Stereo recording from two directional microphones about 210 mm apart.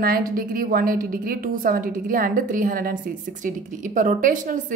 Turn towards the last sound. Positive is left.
turn(degrees=-40)  # may be behind; listen again after turning